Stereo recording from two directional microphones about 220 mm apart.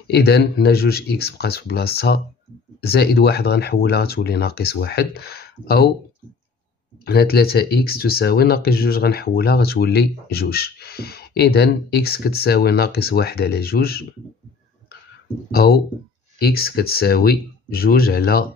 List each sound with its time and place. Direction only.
0.1 s speech: 50° left (ahead or behind)
7.1 s speech: 45° left (ahead or behind)
15.5 s speech: 45° left (ahead or behind)